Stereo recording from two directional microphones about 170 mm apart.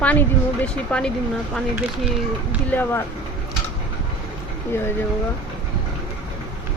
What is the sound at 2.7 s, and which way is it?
Speech, 10° left (ahead or behind).